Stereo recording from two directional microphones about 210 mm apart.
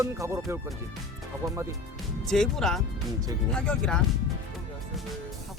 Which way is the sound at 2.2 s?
Centre (ahead or behind).